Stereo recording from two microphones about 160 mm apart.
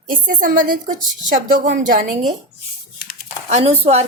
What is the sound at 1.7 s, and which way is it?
Speech, 60° right (ahead or behind).